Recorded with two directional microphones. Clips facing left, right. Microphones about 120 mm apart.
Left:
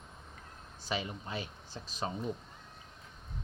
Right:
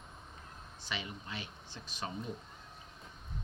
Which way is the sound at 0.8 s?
40° left (ahead or behind).